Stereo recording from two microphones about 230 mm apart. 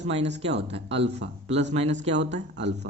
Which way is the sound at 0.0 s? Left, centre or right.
Right.